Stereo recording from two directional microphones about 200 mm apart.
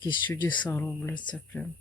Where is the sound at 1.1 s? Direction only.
20° left (ahead or behind).